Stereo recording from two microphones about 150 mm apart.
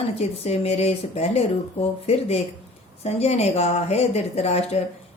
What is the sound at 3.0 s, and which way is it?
Speech, 45° left (ahead or behind).